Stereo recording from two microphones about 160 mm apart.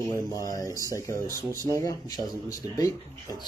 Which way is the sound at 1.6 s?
20° left (ahead or behind).